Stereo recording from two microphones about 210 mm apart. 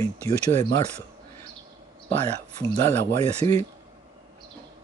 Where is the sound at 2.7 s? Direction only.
10° left (ahead or behind).